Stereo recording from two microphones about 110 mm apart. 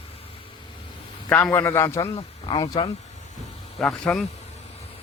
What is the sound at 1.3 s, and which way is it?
Speech, 15° left (ahead or behind).